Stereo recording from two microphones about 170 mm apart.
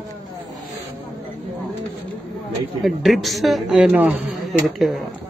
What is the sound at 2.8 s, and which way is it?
Speech, centre (ahead or behind).